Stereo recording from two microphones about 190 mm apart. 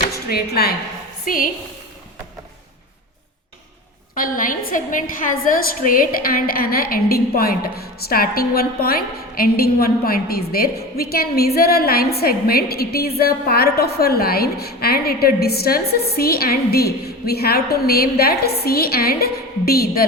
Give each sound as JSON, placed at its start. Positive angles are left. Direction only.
{"t": 0.1, "sound": "a woman's voice", "side_deg": 55}
{"t": 4.1, "sound": "a woman's voice", "side_deg": 45}